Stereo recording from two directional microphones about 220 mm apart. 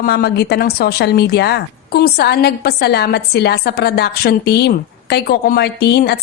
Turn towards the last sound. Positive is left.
turn(degrees=45)  # may be behind; listen again after turning